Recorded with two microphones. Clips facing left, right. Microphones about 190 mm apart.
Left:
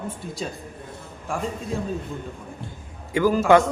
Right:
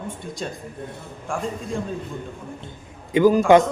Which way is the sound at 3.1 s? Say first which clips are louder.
Right 5 dB; 20° right (ahead or behind).